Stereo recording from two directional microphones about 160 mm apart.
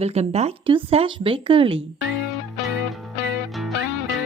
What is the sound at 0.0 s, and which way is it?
Speech, 40° right (ahead or behind).